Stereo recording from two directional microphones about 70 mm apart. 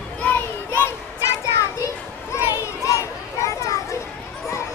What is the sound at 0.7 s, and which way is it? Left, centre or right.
Children playing, left.